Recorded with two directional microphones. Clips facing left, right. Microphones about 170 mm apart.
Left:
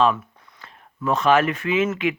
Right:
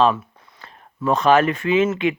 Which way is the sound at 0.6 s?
35° right (ahead or behind).